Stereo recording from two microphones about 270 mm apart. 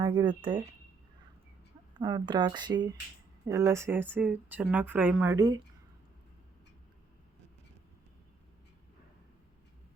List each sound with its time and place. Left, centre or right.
0.0 s speech: centre
2.0 s speech: centre